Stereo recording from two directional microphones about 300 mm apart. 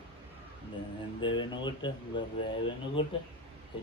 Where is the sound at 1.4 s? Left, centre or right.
Centre.